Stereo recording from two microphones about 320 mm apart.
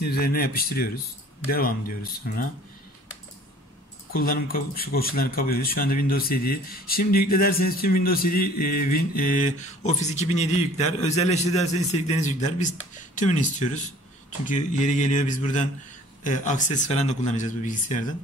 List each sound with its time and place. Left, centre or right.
0.0 s speech: left
4.1 s speech: left